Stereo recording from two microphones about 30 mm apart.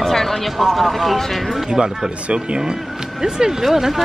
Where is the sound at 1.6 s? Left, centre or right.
Right.